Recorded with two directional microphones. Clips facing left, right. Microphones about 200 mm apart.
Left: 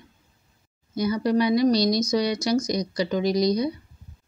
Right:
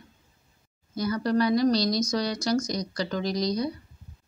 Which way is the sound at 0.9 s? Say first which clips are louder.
Left 3 dB; 10° left (ahead or behind).